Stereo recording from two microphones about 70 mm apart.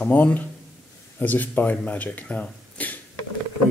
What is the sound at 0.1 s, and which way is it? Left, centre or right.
Speech, left.